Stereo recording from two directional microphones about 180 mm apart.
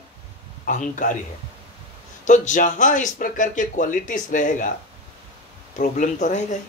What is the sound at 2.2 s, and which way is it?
Speech, 45° left (ahead or behind).